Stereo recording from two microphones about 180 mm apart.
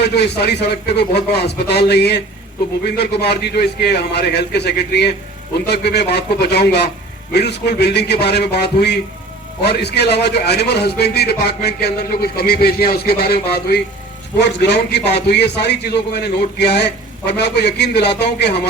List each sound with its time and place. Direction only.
0.9 s a man's voice: 65° left (ahead or behind)